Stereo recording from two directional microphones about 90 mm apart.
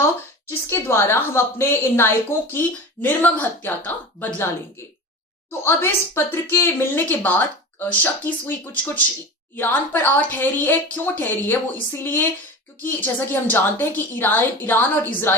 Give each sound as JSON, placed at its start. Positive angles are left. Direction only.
{"t": 0.7, "sound": "a woman's voice", "side_deg": 30}
{"t": 5.5, "sound": "a woman's voice", "side_deg": 25}